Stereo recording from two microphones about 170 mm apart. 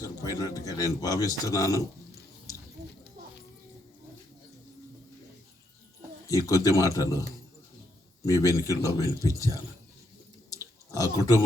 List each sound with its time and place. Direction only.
0.0 s speech: 20° left (ahead or behind)
6.2 s speech: 20° left (ahead or behind)
11.0 s pig: 20° left (ahead or behind)